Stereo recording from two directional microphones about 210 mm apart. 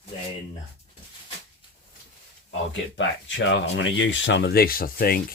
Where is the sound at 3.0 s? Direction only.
60° left (ahead or behind); by 5.2 s 45° left (ahead or behind).